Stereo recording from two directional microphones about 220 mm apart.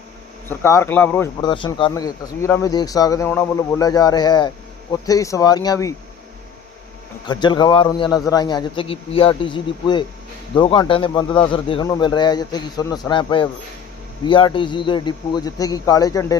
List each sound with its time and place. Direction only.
0.6 s speech: 10° left (ahead or behind)
1.4 s a man's voice: 20° left (ahead or behind)
7.3 s a man's voice: 20° left (ahead or behind)